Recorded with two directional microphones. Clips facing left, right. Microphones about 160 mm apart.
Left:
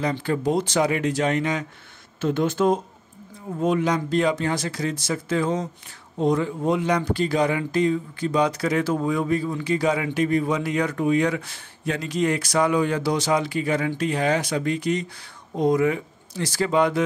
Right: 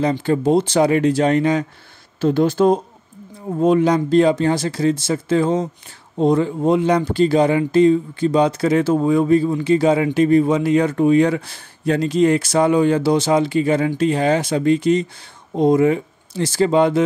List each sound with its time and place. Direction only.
0.2 s a man's voice: 25° right (ahead or behind)